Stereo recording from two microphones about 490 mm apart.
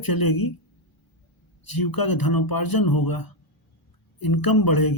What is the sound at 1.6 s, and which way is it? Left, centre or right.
Speech, left.